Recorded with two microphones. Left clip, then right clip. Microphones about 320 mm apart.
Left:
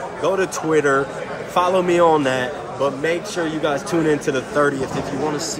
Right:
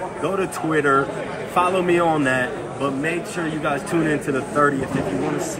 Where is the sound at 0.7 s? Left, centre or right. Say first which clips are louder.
Left 1 dB; left.